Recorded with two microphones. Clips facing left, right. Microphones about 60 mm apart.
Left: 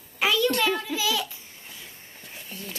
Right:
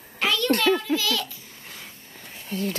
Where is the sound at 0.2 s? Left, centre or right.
Centre.